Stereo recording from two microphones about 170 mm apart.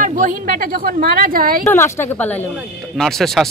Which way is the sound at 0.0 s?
50° right (ahead or behind).